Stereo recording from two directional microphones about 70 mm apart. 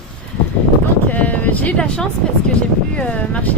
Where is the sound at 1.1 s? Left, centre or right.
Left.